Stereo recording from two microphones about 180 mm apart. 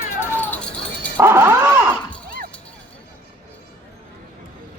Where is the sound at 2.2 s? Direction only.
50° right (ahead or behind).